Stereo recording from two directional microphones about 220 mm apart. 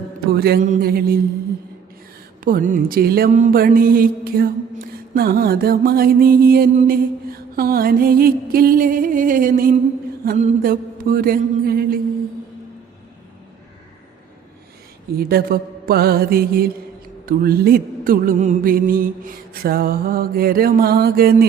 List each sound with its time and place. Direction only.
0.3 s mantra: 45° right (ahead or behind)
2.4 s music: 40° right (ahead or behind)
15.1 s mantra: 45° right (ahead or behind)
17.2 s music: 45° right (ahead or behind)